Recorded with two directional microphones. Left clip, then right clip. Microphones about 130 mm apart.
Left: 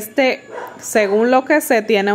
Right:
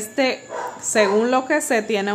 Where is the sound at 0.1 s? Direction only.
30° left (ahead or behind).